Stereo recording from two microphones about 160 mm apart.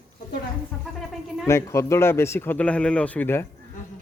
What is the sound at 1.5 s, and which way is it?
A man's voice, 15° left (ahead or behind).